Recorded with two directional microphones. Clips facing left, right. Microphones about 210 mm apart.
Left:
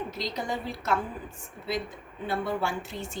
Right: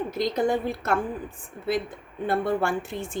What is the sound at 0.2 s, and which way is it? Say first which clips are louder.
Speech: right 11 dB; 55° right (ahead or behind).